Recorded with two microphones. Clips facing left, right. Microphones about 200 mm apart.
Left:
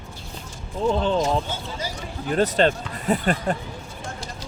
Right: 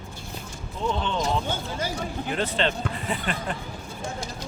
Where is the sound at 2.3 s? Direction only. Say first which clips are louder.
Left 7 dB; 40° left (ahead or behind).